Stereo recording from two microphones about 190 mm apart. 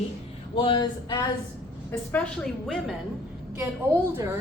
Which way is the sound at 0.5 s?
25° left (ahead or behind).